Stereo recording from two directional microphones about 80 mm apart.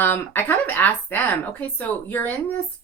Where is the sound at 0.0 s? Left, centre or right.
Left.